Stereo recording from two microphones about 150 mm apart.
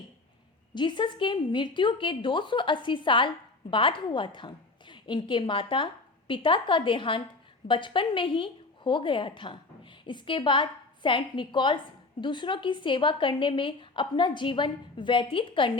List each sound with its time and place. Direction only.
0.7 s speech: 30° left (ahead or behind)